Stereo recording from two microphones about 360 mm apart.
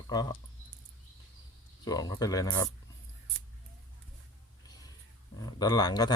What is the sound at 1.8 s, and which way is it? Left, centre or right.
Speech, centre.